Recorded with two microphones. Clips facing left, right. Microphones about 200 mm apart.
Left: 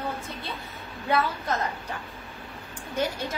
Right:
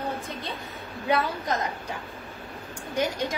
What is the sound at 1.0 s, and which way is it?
Speech, 15° right (ahead or behind).